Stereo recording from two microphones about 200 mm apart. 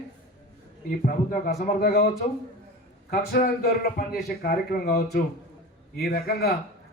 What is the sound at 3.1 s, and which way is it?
A man's voice, 45° left (ahead or behind).